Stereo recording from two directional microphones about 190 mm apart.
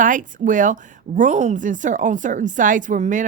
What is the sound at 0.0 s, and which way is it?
Speech, 45° right (ahead or behind).